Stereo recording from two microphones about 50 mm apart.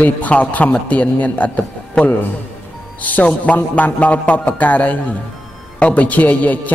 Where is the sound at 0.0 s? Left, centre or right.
Left.